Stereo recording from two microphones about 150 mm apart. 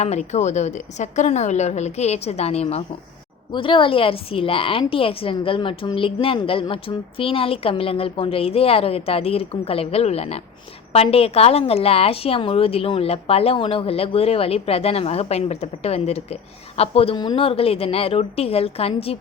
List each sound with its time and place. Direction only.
0.0 s a woman's voice: 45° left (ahead or behind)